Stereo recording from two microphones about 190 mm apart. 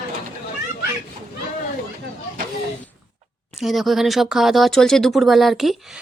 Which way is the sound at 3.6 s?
Centre (ahead or behind).